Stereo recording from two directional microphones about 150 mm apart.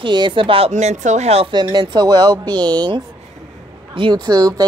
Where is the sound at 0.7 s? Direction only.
50° right (ahead or behind).